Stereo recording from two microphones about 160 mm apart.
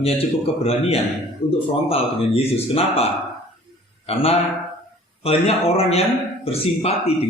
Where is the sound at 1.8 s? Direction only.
35° left (ahead or behind).